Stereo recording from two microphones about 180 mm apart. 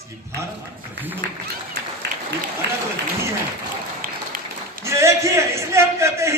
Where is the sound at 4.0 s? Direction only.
50° right (ahead or behind).